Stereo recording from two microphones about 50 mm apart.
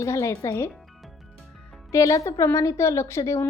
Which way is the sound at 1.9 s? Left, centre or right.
Left.